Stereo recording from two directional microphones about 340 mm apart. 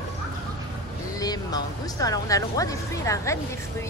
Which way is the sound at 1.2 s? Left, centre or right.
Centre.